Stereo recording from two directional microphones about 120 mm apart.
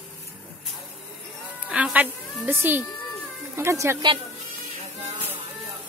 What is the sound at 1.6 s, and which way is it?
Music, 10° right (ahead or behind).